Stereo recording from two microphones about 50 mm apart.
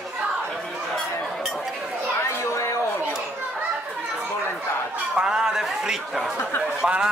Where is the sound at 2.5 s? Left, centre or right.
Left.